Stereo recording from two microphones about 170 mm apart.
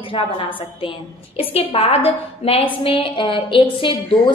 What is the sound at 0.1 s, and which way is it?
A woman's voice, 30° left (ahead or behind).